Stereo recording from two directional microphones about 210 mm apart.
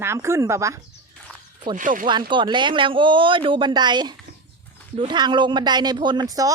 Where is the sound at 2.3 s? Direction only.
20° right (ahead or behind).